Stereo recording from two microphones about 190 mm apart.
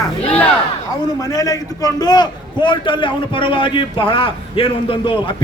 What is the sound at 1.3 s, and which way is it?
A man's voice, 20° left (ahead or behind).